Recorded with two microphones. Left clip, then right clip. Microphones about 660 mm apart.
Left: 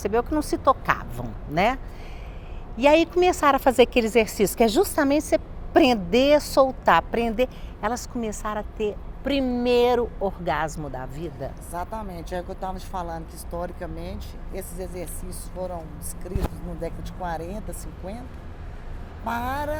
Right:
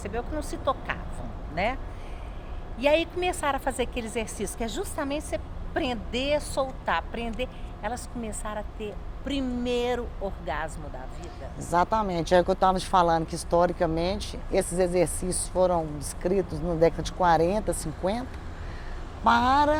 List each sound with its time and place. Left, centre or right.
0.0 s a woman's voice: left
11.7 s speech: right
16.8 s speech: right
19.2 s speech: right